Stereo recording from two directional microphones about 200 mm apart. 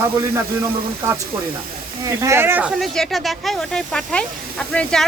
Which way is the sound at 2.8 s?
Centre (ahead or behind).